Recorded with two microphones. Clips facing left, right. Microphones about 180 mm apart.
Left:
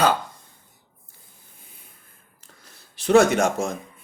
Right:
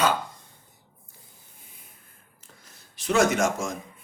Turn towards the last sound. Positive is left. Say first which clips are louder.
# left 3 dB
turn(degrees=60)  # may be behind; listen again after turning